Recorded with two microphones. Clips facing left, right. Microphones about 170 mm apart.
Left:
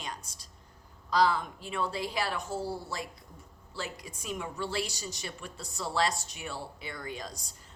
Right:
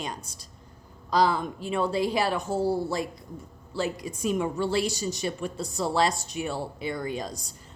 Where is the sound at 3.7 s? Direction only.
20° right (ahead or behind).